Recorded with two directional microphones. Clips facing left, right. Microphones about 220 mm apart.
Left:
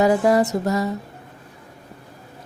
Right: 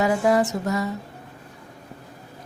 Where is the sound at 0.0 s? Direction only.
35° left (ahead or behind).